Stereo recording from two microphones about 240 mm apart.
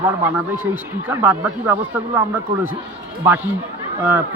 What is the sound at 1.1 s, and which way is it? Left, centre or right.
Speech, centre.